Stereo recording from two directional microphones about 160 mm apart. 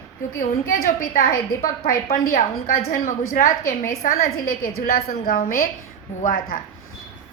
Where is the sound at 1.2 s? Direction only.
65° left (ahead or behind).